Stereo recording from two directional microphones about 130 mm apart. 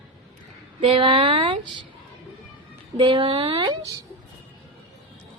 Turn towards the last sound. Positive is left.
turn(degrees=-40)  # may be behind; listen again after turning